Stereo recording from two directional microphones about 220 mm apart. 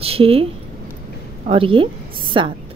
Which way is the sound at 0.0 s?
25° right (ahead or behind).